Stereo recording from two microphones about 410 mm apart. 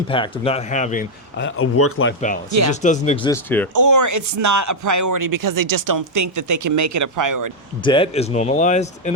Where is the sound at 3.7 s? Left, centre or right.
Right.